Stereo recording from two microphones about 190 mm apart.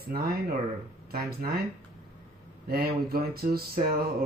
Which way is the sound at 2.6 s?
55° right (ahead or behind).